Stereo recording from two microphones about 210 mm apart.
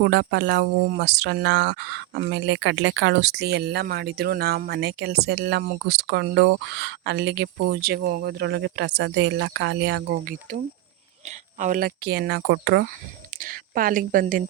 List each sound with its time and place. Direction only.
0.0 s speech: 55° right (ahead or behind)
13.4 s a woman's voice: 40° right (ahead or behind)